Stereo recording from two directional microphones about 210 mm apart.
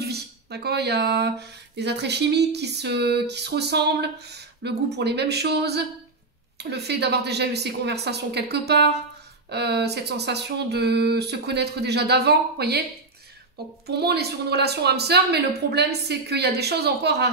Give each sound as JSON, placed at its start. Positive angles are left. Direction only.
{"t": 0.0, "sound": "speech", "side_deg": -50}
{"t": 13.8, "sound": "speech", "side_deg": -50}